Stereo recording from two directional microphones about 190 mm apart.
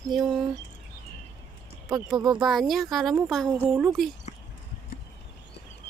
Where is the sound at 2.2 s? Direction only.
20° right (ahead or behind).